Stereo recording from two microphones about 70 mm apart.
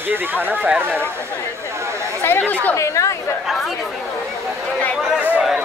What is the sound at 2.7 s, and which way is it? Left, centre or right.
Speech, left.